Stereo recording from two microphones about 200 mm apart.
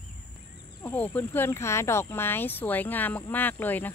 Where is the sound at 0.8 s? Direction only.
10° left (ahead or behind).